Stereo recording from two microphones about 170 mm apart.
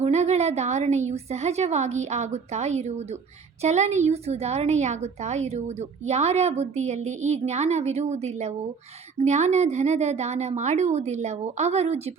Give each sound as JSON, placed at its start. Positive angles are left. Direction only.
{"t": 0.0, "sound": "a woman's voice", "side_deg": -40}